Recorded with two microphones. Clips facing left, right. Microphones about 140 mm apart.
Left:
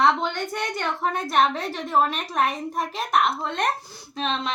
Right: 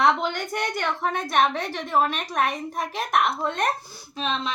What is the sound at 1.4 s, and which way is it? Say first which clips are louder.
A woman's voice: left 1 dB; centre (ahead or behind).